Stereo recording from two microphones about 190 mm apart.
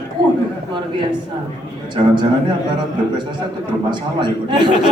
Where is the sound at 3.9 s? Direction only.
25° right (ahead or behind).